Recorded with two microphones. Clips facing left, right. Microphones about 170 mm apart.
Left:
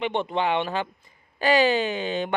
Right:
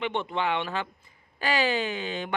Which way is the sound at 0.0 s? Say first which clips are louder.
Left 4 dB; 20° left (ahead or behind).